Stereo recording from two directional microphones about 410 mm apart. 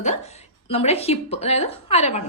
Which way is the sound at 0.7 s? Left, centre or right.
Centre.